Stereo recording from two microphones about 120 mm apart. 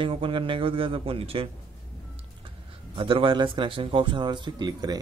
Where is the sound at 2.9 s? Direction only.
45° right (ahead or behind).